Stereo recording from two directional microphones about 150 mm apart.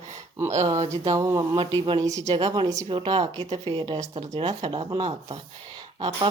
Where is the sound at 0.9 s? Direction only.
20° right (ahead or behind).